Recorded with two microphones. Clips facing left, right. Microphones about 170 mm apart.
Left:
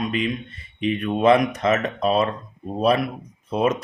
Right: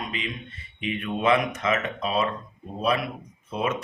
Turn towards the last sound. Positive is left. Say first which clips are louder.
# left 6 dB
turn(degrees=40)  # may be behind; listen again after turning